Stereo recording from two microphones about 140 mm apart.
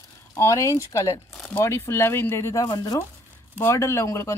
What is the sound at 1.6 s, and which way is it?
Speech, 20° left (ahead or behind).